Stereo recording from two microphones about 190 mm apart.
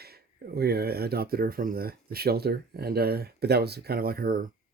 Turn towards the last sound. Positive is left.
turn(degrees=-50)  # may be behind; listen again after turning